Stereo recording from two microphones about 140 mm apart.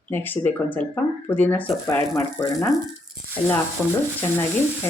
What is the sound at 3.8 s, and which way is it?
Speech, 15° left (ahead or behind).